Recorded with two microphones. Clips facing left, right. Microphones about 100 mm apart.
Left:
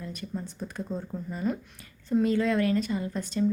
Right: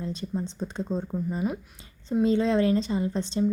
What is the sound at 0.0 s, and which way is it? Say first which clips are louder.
A woman's voice: right 5 dB; 25° right (ahead or behind).